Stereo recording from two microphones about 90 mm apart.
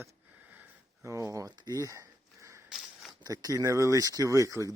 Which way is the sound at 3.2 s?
45° right (ahead or behind).